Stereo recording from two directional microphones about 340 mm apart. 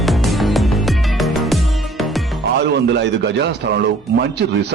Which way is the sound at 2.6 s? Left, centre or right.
Right.